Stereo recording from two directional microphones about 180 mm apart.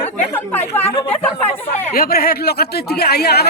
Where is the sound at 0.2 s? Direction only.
10° left (ahead or behind).